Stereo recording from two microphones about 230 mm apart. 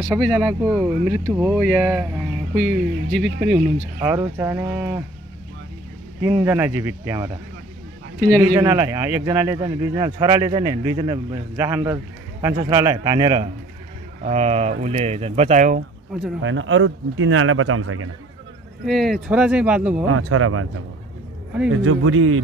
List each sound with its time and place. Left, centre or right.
0.1 s speech: centre
6.3 s speech: centre
8.4 s speech: centre
14.2 s speech: right
16.4 s speech: right
18.9 s speech: centre
20.1 s speech: right
21.8 s speech: right